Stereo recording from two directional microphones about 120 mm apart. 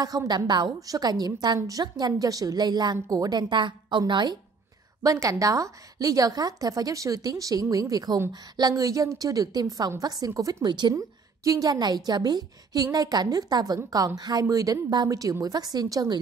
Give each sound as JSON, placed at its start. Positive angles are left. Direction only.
{"t": 0.0, "sound": "a woman's voice", "side_deg": -30}
{"t": 5.0, "sound": "a woman's voice", "side_deg": -30}